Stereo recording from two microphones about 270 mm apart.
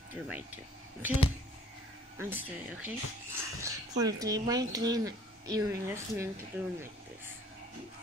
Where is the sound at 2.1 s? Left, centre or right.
Centre.